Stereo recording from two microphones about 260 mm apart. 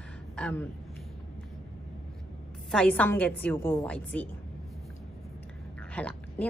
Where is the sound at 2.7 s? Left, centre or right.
Centre.